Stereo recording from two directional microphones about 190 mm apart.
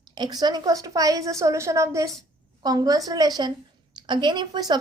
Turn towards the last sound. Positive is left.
turn(degrees=-20)  # may be behind; listen again after turning